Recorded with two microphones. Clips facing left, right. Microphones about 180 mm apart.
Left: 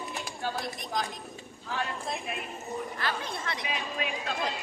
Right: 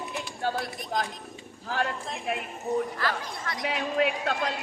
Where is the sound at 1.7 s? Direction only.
70° right (ahead or behind).